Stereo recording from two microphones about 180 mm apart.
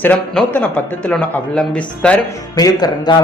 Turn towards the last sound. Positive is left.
turn(degrees=20)  # may be behind; listen again after turning